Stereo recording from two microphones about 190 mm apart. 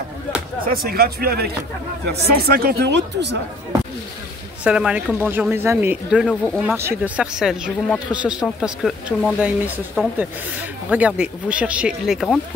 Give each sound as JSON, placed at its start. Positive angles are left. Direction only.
{"t": 0.7, "sound": "speech", "side_deg": -55}
{"t": 4.6, "sound": "a woman's voice", "side_deg": -5}